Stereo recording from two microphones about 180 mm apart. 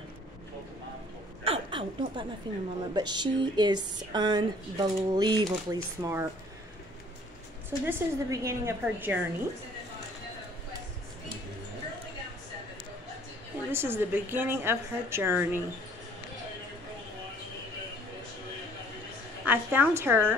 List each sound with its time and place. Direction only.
1.4 s a sound: 30° right (ahead or behind)
2.4 s speech: 25° right (ahead or behind)
7.8 s a woman's voice: 15° right (ahead or behind)
13.7 s a woman's voice: 10° right (ahead or behind)
19.4 s a woman's voice: 10° right (ahead or behind)